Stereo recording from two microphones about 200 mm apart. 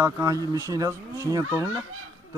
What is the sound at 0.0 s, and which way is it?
Speech, 15° right (ahead or behind).